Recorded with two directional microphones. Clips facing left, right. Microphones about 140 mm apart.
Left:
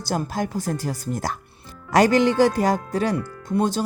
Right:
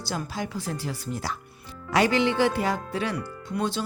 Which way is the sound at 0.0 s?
45° left (ahead or behind).